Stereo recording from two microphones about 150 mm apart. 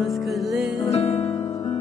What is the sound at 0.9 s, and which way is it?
Music, 45° left (ahead or behind).